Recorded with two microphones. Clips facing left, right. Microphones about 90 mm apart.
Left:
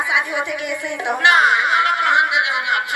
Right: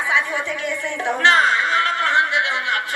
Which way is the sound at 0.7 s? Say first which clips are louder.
Even; 15° left (ahead or behind).